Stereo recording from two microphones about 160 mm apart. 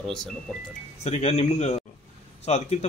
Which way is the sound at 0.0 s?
5° left (ahead or behind).